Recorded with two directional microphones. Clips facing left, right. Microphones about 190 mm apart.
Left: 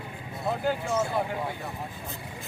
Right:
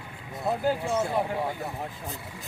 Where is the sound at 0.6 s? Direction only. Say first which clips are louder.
Right 1 dB; 30° right (ahead or behind).